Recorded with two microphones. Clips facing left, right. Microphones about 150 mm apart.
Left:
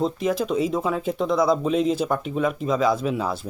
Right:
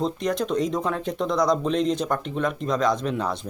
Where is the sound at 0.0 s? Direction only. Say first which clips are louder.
Left 2 dB; 5° left (ahead or behind).